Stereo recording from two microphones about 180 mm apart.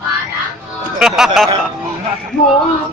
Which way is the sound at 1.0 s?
5° right (ahead or behind).